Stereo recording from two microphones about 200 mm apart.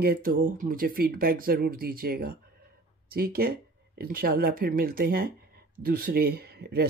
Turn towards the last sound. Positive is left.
turn(degrees=-50)  # may be behind; listen again after turning